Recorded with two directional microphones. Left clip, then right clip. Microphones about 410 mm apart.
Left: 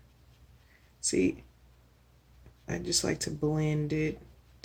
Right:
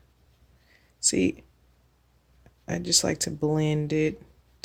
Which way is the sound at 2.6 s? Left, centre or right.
Right.